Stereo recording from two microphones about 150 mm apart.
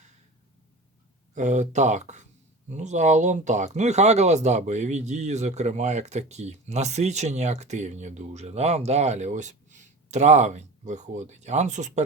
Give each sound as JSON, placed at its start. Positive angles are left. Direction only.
{"t": 1.4, "sound": "speech", "side_deg": -55}